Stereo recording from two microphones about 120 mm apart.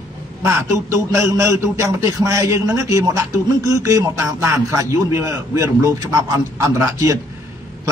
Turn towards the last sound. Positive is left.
turn(degrees=-25)  # may be behind; listen again after turning